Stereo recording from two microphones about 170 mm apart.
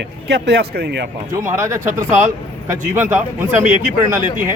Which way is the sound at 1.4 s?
15° right (ahead or behind).